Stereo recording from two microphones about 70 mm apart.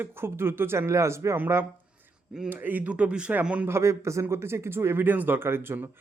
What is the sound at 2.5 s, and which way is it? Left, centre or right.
A man's voice, right.